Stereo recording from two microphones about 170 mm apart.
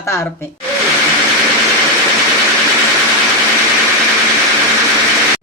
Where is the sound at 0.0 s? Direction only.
15° left (ahead or behind).